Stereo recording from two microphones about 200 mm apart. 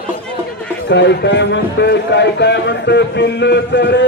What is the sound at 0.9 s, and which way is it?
A man's voice, 60° left (ahead or behind).